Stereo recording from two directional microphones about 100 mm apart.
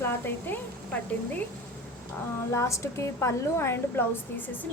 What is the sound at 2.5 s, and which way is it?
A woman's voice, 30° left (ahead or behind).